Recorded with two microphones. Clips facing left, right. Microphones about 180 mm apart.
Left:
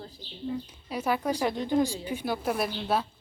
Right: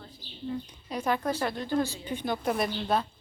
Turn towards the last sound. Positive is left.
turn(degrees=5)  # may be behind; listen again after turning